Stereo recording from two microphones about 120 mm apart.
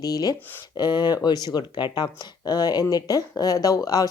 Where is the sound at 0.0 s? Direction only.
30° left (ahead or behind).